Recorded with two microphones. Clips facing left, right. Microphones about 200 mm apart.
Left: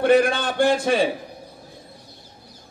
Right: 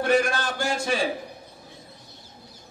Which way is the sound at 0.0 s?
60° left (ahead or behind).